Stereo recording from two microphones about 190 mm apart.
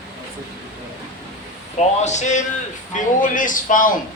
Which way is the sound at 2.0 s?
40° left (ahead or behind).